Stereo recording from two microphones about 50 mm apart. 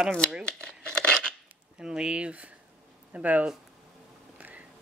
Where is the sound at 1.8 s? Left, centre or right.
Centre; by 3.5 s right.